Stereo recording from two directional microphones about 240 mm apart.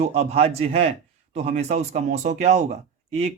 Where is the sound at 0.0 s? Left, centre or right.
Right.